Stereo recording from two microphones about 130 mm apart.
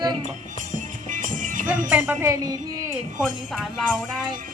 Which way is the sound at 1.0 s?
80° right.